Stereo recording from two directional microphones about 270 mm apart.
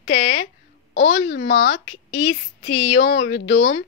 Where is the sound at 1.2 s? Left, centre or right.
Left.